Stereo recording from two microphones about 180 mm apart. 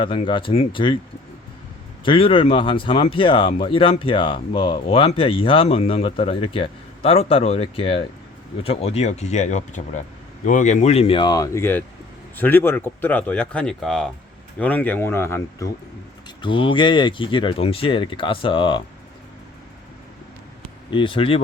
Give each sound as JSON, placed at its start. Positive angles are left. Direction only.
{"t": 0.0, "sound": "speech", "side_deg": 30}
{"t": 2.0, "sound": "speech", "side_deg": 30}
{"t": 16.4, "sound": "speech", "side_deg": 30}
{"t": 20.9, "sound": "speech", "side_deg": 30}